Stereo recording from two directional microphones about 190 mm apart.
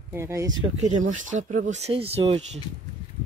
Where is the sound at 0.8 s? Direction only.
40° right (ahead or behind).